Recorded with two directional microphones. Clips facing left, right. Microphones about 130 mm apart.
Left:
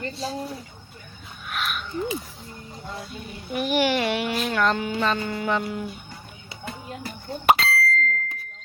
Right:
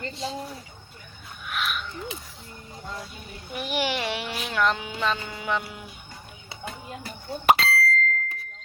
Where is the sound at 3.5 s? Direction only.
50° left (ahead or behind).